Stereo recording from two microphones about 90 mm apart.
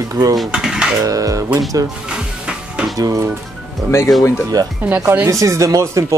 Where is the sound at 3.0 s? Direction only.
40° right (ahead or behind).